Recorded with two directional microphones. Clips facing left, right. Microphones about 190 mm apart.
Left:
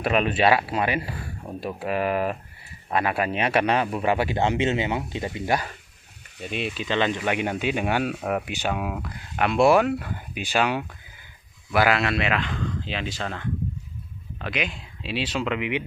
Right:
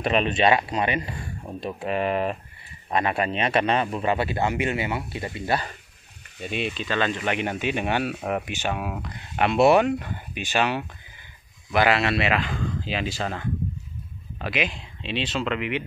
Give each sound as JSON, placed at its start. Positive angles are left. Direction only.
{"t": 0.0, "sound": "speech", "side_deg": 5}
{"t": 6.4, "sound": "speech", "side_deg": 0}
{"t": 6.7, "sound": "speech", "side_deg": 15}
{"t": 8.0, "sound": "a man's voice", "side_deg": -10}
{"t": 8.5, "sound": "speech", "side_deg": 10}
{"t": 9.4, "sound": "speech", "side_deg": 0}
{"t": 10.3, "sound": "speech", "side_deg": 10}
{"t": 11.7, "sound": "a man's voice", "side_deg": 0}